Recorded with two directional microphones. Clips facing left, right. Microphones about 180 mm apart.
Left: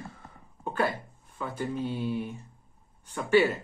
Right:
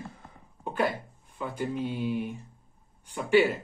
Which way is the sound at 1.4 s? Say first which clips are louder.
Right 1 dB; 15° right (ahead or behind).